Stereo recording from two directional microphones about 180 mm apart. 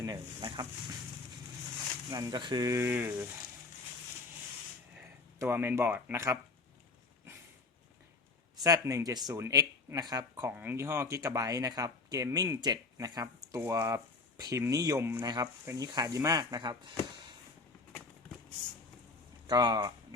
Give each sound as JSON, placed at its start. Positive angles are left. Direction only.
{"t": 0.0, "sound": "speech", "side_deg": -25}
{"t": 2.0, "sound": "speech", "side_deg": -20}
{"t": 4.9, "sound": "speech", "side_deg": -10}
{"t": 8.6, "sound": "speech", "side_deg": -20}
{"t": 19.5, "sound": "speech", "side_deg": -20}